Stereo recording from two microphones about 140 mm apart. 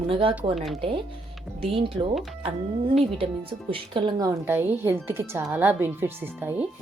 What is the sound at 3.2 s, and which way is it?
A woman's voice, 40° right (ahead or behind).